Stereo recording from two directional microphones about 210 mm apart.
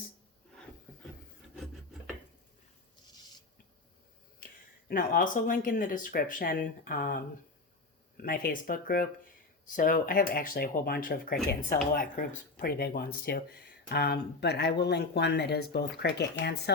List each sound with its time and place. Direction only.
1.5 s filing: centre (ahead or behind)
4.9 s speech: 40° left (ahead or behind)